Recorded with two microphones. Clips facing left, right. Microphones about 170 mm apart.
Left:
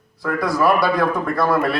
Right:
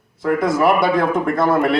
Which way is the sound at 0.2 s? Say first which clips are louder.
Right 3 dB; 20° right (ahead or behind).